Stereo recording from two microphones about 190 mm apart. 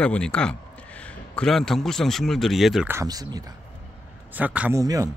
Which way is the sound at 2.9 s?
15° right (ahead or behind).